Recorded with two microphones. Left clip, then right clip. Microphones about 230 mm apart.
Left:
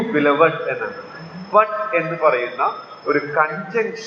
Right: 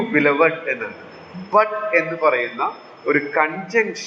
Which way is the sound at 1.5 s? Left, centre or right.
Right.